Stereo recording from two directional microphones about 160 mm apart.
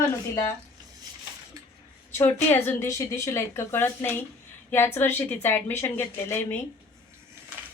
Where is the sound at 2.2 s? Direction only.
15° left (ahead or behind).